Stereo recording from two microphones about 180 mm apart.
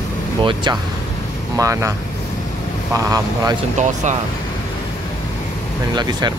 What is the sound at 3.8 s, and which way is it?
Speech, 40° right (ahead or behind).